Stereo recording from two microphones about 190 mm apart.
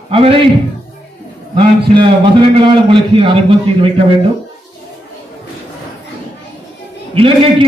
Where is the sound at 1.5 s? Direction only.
25° right (ahead or behind).